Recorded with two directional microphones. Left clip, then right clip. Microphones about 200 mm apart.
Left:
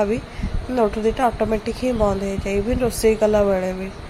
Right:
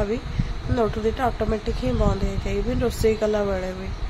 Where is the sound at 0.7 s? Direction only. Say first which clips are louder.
Left 4 dB; 15° left (ahead or behind).